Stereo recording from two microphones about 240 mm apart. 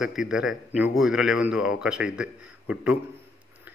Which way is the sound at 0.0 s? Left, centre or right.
Centre.